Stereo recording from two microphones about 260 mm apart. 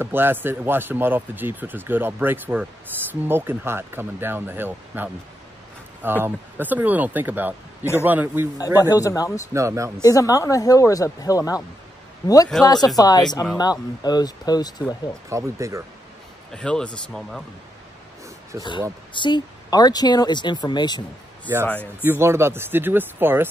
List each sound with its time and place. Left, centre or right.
0.0 s speech: centre
8.9 s speech: centre
9.5 s speech: centre
10.0 s speech: centre
12.6 s speech: centre
15.2 s speech: centre
16.5 s speech: centre
18.5 s speech: centre
19.1 s speech: centre
22.0 s speech: centre